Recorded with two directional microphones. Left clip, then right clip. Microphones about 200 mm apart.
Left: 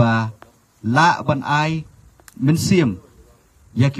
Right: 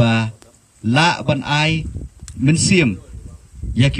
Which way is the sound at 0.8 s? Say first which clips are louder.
Left 1 dB; 25° right (ahead or behind).